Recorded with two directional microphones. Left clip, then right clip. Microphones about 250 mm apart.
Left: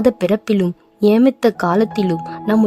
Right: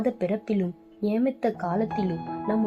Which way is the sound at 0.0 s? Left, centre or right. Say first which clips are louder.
Left 11 dB; left.